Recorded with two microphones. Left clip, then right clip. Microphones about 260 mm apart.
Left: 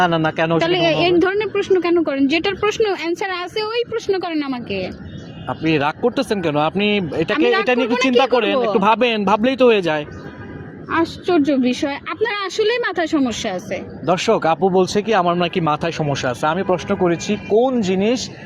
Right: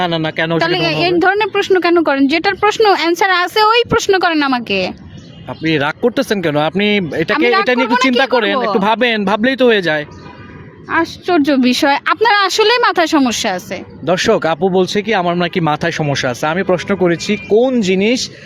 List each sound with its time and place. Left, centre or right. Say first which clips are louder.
0.0 s a woman's voice: even; centre; by 4.9 s right
5.5 s a woman's voice: right 2 dB; right